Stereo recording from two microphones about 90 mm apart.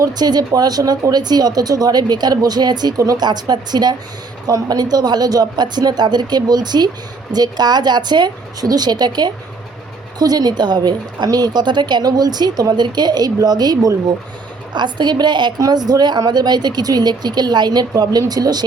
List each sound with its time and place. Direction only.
0.0 s a woman's voice: 50° right (ahead or behind)